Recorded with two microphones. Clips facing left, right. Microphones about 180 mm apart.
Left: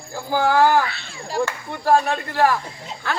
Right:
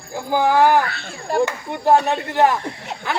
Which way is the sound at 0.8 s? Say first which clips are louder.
Right 1 dB; 50° right (ahead or behind).